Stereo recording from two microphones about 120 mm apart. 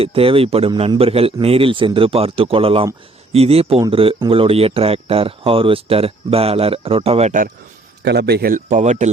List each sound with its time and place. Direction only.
0.0 s speech: 50° right (ahead or behind); by 7.4 s 70° right (ahead or behind)
8.5 s speech: 85° right